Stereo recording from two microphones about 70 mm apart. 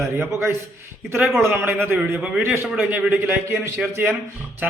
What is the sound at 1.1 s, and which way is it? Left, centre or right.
Speech, right.